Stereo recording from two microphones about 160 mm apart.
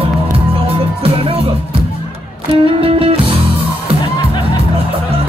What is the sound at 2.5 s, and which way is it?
Music, 35° right (ahead or behind).